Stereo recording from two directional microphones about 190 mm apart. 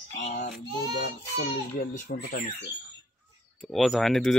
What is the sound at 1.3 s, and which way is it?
Speech, 55° left (ahead or behind).